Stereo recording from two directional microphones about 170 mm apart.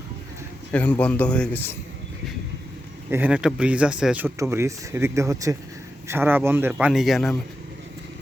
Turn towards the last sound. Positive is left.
turn(degrees=0)  # may be behind; listen again after turning